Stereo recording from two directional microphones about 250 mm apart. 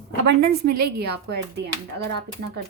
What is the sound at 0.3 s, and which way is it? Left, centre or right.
A woman's voice, right.